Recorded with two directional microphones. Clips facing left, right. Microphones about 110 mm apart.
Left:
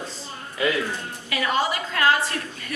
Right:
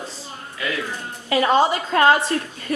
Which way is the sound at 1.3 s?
30° right (ahead or behind).